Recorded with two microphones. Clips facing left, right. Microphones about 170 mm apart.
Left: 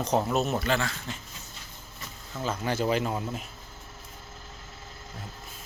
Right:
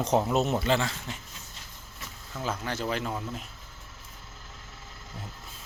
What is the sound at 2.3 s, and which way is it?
Speech, 5° left (ahead or behind).